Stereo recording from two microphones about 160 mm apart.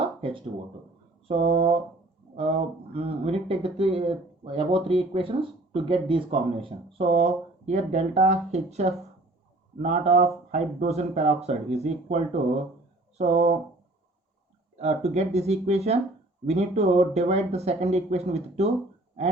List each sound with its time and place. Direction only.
0.0 s a sound: 35° right (ahead or behind)
1.3 s speech: 40° right (ahead or behind)
14.8 s speech: 45° right (ahead or behind)